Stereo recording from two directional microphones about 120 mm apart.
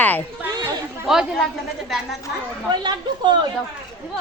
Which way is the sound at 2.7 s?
35° right (ahead or behind).